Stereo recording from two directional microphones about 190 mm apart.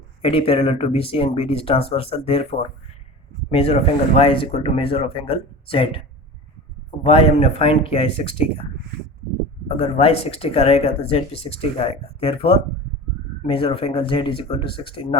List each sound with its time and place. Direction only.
0.2 s speech: 30° left (ahead or behind)
7.0 s speech: 30° left (ahead or behind)